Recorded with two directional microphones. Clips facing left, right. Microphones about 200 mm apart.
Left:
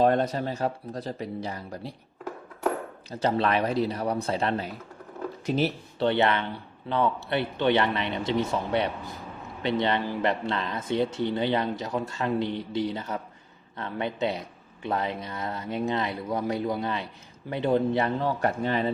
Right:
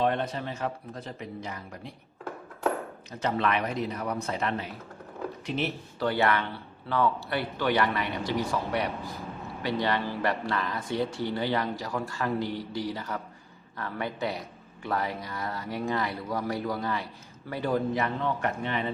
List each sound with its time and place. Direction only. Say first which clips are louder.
0.0 s speech: left 5 dB; 40° left (ahead or behind)
3.1 s speech: left 3 dB; 35° left (ahead or behind)
6.1 s speech: left 2 dB; 20° left (ahead or behind)